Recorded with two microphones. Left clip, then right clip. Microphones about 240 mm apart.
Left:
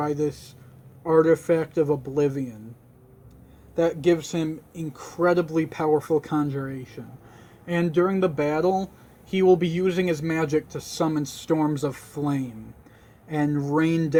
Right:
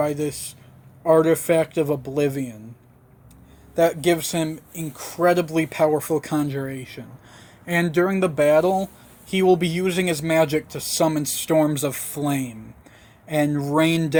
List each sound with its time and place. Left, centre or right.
0.0 s speech: right
1.5 s speech: right
3.8 s speech: right